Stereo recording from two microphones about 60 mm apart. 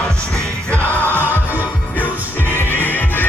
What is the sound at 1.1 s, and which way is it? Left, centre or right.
Music, right.